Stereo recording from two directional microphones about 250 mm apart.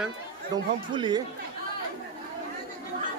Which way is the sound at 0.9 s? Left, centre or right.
Centre.